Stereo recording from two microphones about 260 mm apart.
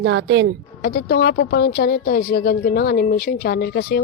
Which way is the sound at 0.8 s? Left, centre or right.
Left.